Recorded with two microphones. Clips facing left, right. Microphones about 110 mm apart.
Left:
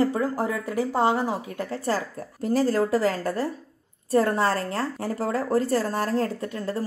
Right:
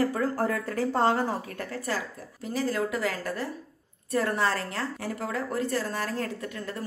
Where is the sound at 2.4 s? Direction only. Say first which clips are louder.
Left 6 dB; 45° left (ahead or behind).